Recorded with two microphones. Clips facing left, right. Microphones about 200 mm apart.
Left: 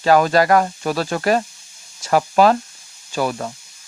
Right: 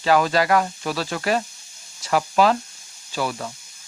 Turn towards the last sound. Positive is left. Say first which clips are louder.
# left 4 dB
turn(degrees=45)  # may be behind; listen again after turning